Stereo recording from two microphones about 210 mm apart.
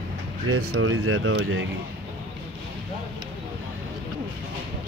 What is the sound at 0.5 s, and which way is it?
Speech, 90° right.